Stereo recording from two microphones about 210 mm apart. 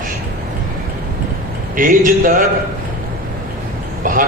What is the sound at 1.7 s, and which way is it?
Speech, 40° right (ahead or behind).